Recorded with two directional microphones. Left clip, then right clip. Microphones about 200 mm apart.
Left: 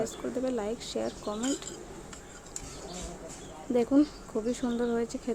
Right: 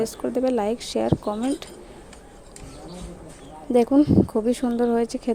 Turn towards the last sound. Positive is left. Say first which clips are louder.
# right 8 dB
turn(degrees=-35)  # may be behind; listen again after turning